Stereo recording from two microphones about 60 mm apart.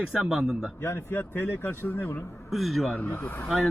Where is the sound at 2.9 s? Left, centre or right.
Left.